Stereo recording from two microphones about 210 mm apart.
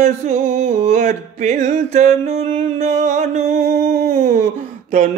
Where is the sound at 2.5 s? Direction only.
35° right (ahead or behind).